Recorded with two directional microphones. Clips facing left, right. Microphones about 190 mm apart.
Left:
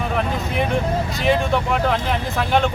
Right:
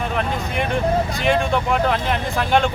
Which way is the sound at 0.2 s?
Centre (ahead or behind).